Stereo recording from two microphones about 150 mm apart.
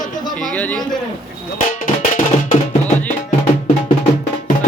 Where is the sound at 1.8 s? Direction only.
65° left (ahead or behind).